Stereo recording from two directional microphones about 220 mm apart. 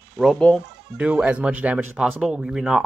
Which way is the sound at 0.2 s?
5° left (ahead or behind).